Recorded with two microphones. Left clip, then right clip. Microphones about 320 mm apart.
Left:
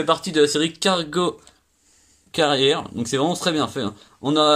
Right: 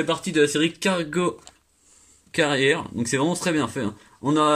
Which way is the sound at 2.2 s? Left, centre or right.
Left.